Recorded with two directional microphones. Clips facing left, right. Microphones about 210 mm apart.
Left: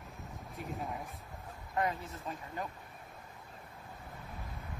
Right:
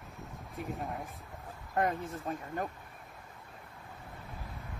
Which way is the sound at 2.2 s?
50° right (ahead or behind).